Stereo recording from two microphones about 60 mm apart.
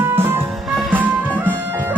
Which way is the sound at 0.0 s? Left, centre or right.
Right.